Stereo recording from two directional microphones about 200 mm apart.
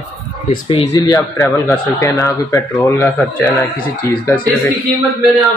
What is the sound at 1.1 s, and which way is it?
Speech, 15° left (ahead or behind).